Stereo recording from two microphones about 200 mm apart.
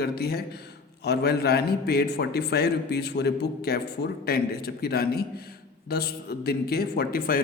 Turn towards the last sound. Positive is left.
turn(degrees=45)  # may be behind; listen again after turning